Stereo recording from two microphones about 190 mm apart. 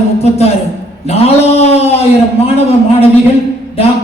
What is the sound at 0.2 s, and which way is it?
Speech, 35° left (ahead or behind).